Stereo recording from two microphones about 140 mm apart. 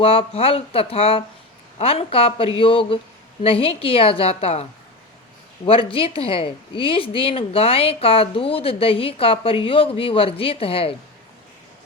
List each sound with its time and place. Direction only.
0.0 s speech: 40° left (ahead or behind)
5.6 s speech: 40° left (ahead or behind)